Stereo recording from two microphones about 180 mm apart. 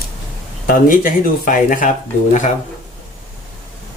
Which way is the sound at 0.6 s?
50° left (ahead or behind).